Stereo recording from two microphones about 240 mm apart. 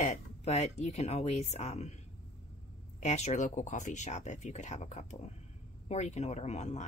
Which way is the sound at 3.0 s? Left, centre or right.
Left.